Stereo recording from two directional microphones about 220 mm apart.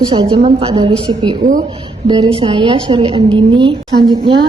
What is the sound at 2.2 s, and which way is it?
A woman's voice, 20° right (ahead or behind).